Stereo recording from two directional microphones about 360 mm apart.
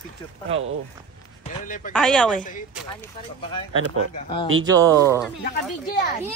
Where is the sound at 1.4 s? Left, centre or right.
Left.